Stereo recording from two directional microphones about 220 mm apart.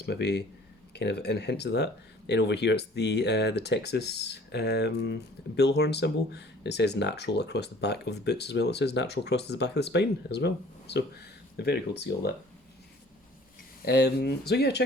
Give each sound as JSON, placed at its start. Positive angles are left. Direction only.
{"t": 0.0, "sound": "speech", "side_deg": 50}
{"t": 13.8, "sound": "speech", "side_deg": 45}